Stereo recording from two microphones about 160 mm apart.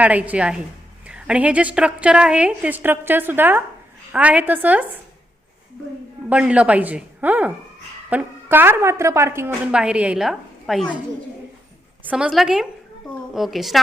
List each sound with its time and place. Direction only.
0.0 s a woman's voice: 10° right (ahead or behind)
6.2 s a woman's voice: 5° right (ahead or behind)
12.0 s a woman's voice: 5° right (ahead or behind)